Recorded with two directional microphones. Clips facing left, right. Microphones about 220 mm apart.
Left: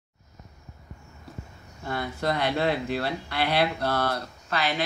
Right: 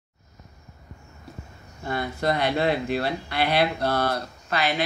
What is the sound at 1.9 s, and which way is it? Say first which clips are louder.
Speech: right 3 dB; 15° right (ahead or behind).